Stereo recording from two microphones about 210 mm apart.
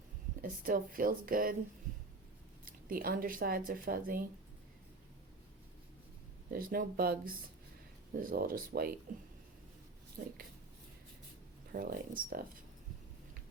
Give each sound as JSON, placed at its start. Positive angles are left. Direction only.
{"t": 0.4, "sound": "speech", "side_deg": -40}
{"t": 2.6, "sound": "speech", "side_deg": -45}
{"t": 6.5, "sound": "speech", "side_deg": -45}
{"t": 10.2, "sound": "speech", "side_deg": -40}
{"t": 11.7, "sound": "speech", "side_deg": -45}